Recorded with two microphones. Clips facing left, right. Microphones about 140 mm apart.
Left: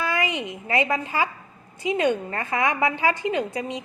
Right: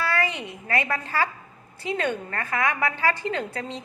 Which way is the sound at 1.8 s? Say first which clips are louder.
Left 5 dB; 15° left (ahead or behind).